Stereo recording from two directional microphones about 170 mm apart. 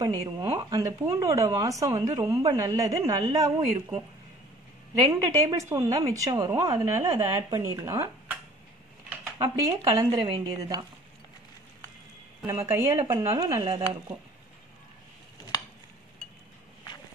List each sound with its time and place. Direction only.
0.0 s speech: 20° right (ahead or behind)
5.1 s speech: 20° right (ahead or behind)
12.6 s speech: 15° right (ahead or behind)